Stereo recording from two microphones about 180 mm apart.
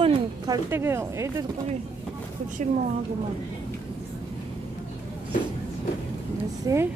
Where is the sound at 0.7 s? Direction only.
15° right (ahead or behind).